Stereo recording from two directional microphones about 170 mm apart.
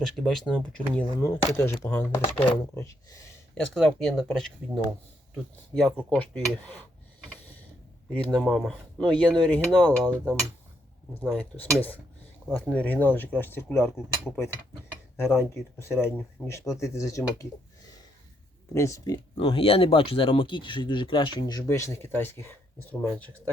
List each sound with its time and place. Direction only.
0.0 s cutlery: centre (ahead or behind)
1.2 s speech: 15° left (ahead or behind)
3.6 s cutlery: 5° left (ahead or behind)
6.1 s speech: 10° left (ahead or behind)
8.1 s cutlery: 5° left (ahead or behind)
11.1 s speech: 10° left (ahead or behind)
18.7 s speech: 15° left (ahead or behind)